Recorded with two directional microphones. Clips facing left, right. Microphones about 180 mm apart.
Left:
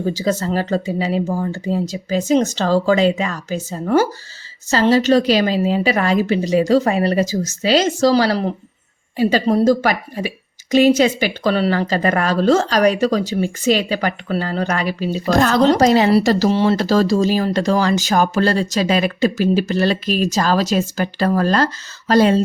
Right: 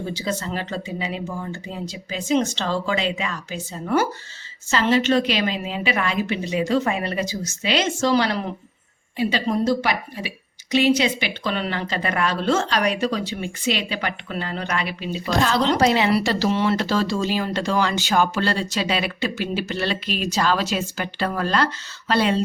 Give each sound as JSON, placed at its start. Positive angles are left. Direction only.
{"t": 0.0, "sound": "speech", "side_deg": 40}